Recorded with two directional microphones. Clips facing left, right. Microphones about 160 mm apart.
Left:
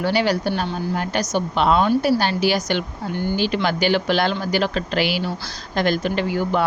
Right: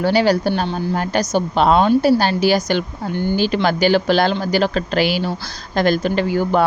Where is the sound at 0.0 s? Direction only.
35° right (ahead or behind).